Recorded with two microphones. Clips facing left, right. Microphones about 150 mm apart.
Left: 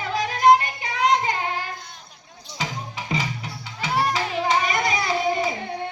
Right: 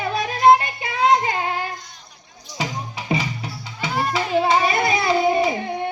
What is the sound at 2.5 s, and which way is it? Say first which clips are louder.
Music: right 3 dB; 15° right (ahead or behind).